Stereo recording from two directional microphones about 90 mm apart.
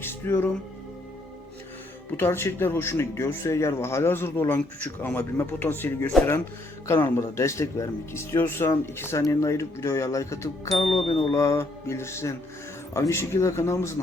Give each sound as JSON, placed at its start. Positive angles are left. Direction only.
{"t": 0.0, "sound": "music", "side_deg": 25}
{"t": 2.1, "sound": "speech", "side_deg": 25}
{"t": 10.8, "sound": "speech", "side_deg": 90}
{"t": 11.3, "sound": "speech", "side_deg": 35}